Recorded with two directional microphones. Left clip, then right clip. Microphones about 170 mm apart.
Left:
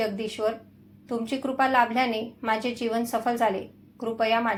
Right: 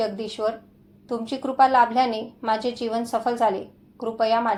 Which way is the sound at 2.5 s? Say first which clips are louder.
Right 2 dB; centre (ahead or behind).